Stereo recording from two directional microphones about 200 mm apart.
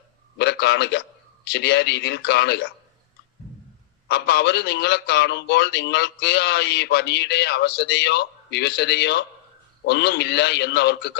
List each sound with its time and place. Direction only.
0.3 s a sound: 55° left (ahead or behind)
1.5 s a man's voice: 55° left (ahead or behind)
4.1 s a man's voice: 55° left (ahead or behind)